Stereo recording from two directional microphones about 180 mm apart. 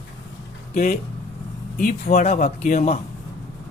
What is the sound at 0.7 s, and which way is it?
Speech, 50° left (ahead or behind).